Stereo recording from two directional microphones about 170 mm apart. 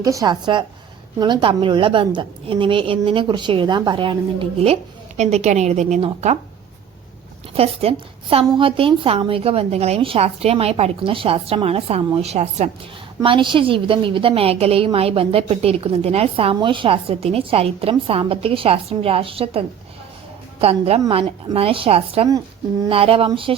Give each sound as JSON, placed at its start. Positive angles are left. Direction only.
{"t": 0.0, "sound": "a woman's voice", "side_deg": -20}
{"t": 7.5, "sound": "a woman's voice", "side_deg": -35}
{"t": 13.2, "sound": "a woman's voice", "side_deg": -30}